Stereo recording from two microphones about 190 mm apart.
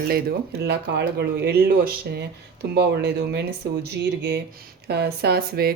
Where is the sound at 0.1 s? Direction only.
55° right (ahead or behind).